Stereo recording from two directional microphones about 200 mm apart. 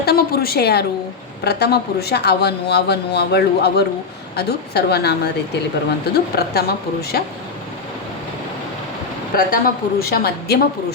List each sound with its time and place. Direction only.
0.0 s a woman's voice: 50° left (ahead or behind)
6.3 s a woman's voice: 50° left (ahead or behind)
9.3 s a woman's voice: 45° left (ahead or behind)